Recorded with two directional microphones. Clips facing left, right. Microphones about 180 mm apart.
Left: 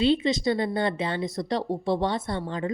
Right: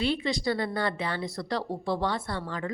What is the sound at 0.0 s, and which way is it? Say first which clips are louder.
Speech: left 5 dB; 20° left (ahead or behind).